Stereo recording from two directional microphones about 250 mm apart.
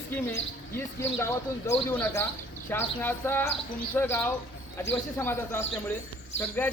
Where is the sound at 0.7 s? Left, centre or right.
Centre.